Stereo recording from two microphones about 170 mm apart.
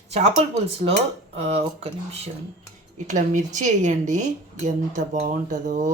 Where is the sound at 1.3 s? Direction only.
35° right (ahead or behind).